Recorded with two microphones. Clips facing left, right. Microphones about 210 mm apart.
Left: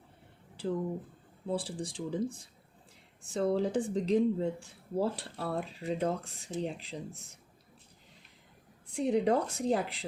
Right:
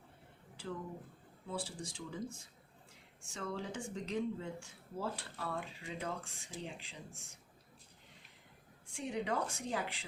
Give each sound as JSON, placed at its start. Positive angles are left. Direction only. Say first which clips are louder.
{"t": 1.5, "sound": "speech", "louder": "left 8 dB", "side_deg": 35}
{"t": 8.9, "sound": "speech", "louder": "left 11 dB", "side_deg": 35}